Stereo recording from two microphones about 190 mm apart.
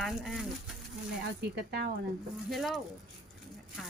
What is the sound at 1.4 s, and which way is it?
Speech, 55° right (ahead or behind).